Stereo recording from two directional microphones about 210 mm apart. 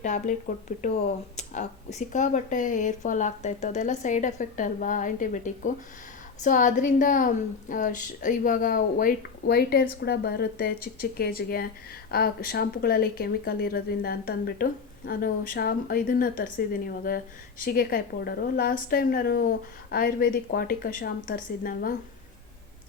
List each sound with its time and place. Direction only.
0.0 s a woman's voice: 35° left (ahead or behind)